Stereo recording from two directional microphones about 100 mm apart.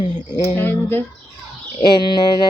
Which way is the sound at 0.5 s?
20° left (ahead or behind).